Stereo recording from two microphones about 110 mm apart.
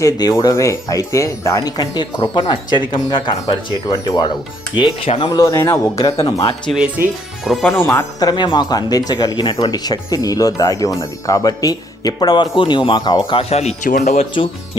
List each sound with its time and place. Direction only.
0.0 s speech: 35° left (ahead or behind)
5.0 s speech: 60° left (ahead or behind)
5.3 s speech: 30° left (ahead or behind)
6.7 s speech: 10° right (ahead or behind)
7.4 s speech: centre (ahead or behind)
8.2 s speech: 40° left (ahead or behind)
13.3 s speech: 70° left (ahead or behind)